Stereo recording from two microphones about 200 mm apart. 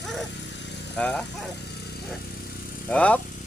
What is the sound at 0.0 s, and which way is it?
Vehicle, centre (ahead or behind).